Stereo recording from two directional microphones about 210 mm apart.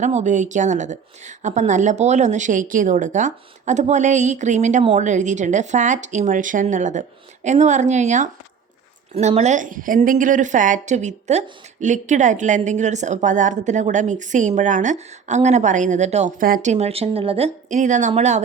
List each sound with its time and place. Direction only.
0.0 s a woman's voice: 35° right (ahead or behind)